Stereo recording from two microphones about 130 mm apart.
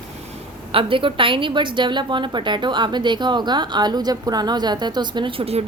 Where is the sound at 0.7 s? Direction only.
45° right (ahead or behind).